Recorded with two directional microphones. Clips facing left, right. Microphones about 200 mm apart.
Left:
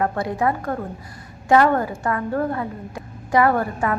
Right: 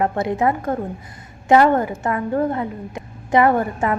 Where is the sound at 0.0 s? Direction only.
25° right (ahead or behind).